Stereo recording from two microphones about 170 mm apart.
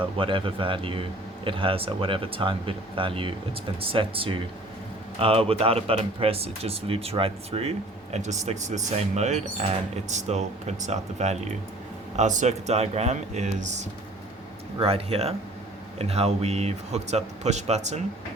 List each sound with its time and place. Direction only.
0.2 s speech: 30° right (ahead or behind)